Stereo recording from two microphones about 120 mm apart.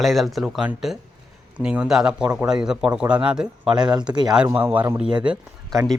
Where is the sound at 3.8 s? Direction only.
35° right (ahead or behind).